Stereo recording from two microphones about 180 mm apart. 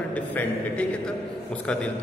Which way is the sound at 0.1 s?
5° left (ahead or behind).